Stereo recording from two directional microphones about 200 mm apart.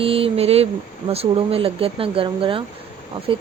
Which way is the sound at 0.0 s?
30° right (ahead or behind).